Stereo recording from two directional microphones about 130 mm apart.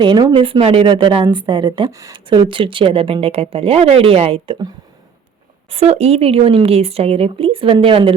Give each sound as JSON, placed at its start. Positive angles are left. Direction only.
{"t": 0.0, "sound": "a woman's voice", "side_deg": -35}
{"t": 5.7, "sound": "speech", "side_deg": -55}